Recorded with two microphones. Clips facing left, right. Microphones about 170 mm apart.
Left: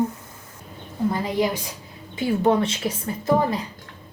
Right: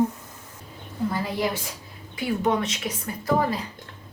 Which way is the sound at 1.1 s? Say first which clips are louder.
Left 4 dB; 20° left (ahead or behind).